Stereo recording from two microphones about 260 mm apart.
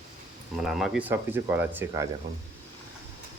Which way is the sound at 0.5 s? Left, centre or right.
Centre.